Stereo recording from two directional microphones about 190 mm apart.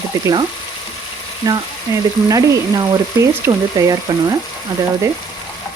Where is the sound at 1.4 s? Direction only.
20° right (ahead or behind).